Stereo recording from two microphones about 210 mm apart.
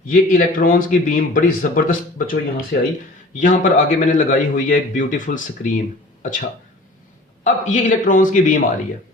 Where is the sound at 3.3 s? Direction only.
40° left (ahead or behind).